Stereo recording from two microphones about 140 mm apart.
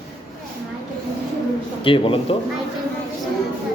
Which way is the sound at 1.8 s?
40° left (ahead or behind).